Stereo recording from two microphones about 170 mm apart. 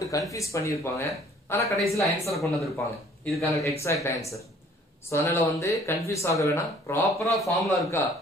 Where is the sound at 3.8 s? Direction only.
15° left (ahead or behind).